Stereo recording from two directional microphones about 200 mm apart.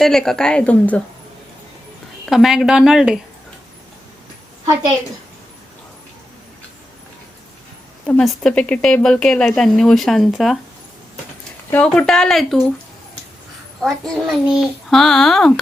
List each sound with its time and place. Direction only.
0.0 s speech: centre (ahead or behind)
2.2 s speech: centre (ahead or behind)
8.0 s speech: 5° left (ahead or behind)
11.7 s speech: 5° left (ahead or behind)
13.8 s speech: centre (ahead or behind)